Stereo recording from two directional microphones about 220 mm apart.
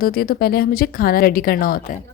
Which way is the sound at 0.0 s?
45° left (ahead or behind).